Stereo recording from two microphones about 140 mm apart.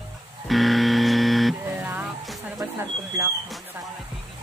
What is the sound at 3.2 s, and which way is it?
Speech, 20° right (ahead or behind).